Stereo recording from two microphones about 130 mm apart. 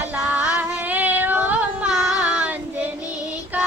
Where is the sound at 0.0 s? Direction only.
10° right (ahead or behind).